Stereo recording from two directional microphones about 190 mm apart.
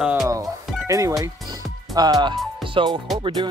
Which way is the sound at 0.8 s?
15° right (ahead or behind).